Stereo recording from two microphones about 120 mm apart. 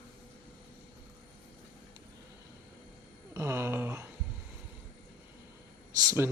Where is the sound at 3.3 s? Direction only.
25° right (ahead or behind).